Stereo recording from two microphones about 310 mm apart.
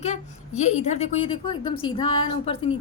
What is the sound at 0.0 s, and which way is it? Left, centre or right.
A woman's voice, left.